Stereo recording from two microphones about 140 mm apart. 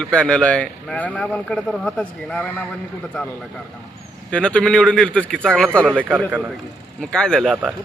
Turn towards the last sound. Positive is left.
turn(degrees=5)  # may be behind; listen again after turning